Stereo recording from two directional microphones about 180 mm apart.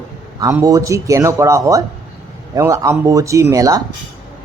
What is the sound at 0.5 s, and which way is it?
Speech, 20° right (ahead or behind).